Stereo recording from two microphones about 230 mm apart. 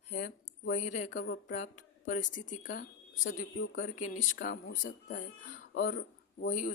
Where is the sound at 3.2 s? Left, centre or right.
Left.